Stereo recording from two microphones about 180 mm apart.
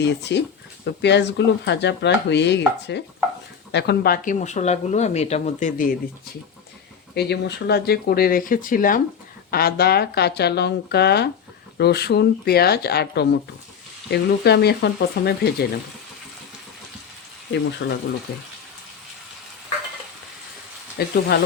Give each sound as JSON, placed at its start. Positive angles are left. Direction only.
{"t": 0.0, "sound": "chopping", "side_deg": 70}
{"t": 3.7, "sound": "speech", "side_deg": 65}
{"t": 7.1, "sound": "speech", "side_deg": 65}
{"t": 17.5, "sound": "chopping", "side_deg": 75}
{"t": 18.3, "sound": "speech", "side_deg": 65}
{"t": 21.0, "sound": "speech", "side_deg": 65}